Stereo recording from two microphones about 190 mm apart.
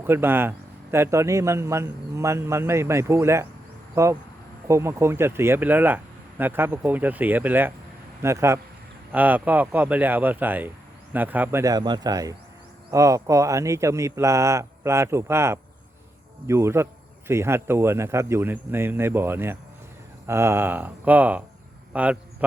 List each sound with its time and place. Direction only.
0.0 s a man's voice: 10° right (ahead or behind)